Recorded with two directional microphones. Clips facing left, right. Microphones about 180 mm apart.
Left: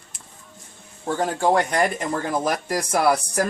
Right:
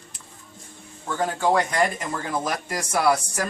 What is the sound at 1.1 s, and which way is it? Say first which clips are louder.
Speech: left 2 dB; 45° left (ahead or behind).